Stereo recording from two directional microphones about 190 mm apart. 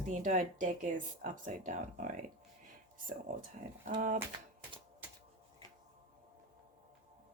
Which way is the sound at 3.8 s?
45° right (ahead or behind).